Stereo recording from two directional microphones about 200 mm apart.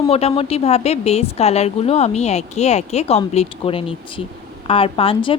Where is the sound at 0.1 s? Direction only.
30° left (ahead or behind).